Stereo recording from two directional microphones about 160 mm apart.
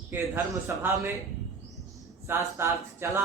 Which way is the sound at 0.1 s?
10° right (ahead or behind).